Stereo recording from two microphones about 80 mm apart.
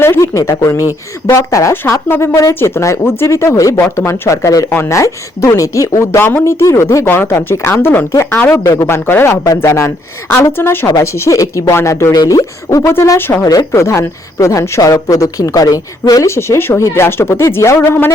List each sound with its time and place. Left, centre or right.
0.0 s a sound: left
0.3 s speech: left
1.7 s speech: left
6.1 s speech: left
8.5 s a woman's voice: left
8.9 s speech: left
9.6 s speech: left
10.3 s speech: left
10.8 s speech: left
12.1 s a woman's voice: left
12.9 s speech: left
13.4 s a woman's voice: left
16.2 s speech: left